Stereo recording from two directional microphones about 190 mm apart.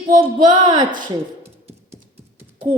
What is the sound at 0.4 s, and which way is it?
Speech, 25° right (ahead or behind).